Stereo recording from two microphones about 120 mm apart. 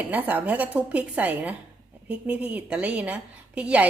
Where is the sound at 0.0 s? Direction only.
15° right (ahead or behind).